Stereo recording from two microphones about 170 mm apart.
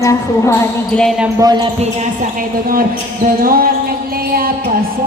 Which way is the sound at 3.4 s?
60° right (ahead or behind).